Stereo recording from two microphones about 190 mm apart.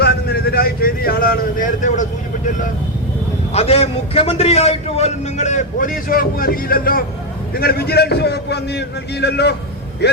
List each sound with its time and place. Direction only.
0.0 s vehicle: 55° left (ahead or behind)
3.5 s a man's voice: 35° left (ahead or behind); by 10.2 s 60° left (ahead or behind)